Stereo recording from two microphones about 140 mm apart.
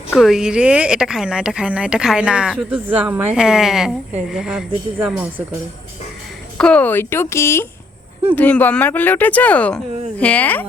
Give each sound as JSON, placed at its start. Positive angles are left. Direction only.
{"t": 0.2, "sound": "speech", "side_deg": 0}
{"t": 3.3, "sound": "a woman's voice", "side_deg": -5}
{"t": 6.6, "sound": "speech", "side_deg": 10}